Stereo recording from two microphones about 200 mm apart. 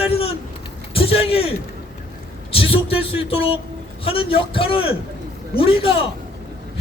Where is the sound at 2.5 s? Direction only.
30° left (ahead or behind).